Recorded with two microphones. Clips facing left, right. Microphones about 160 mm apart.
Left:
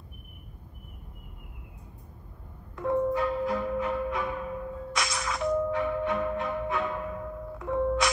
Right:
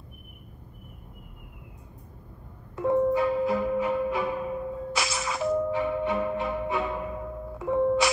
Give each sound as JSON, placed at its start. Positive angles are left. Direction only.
{"t": 2.8, "sound": "music", "side_deg": -10}
{"t": 4.9, "sound": "music", "side_deg": -5}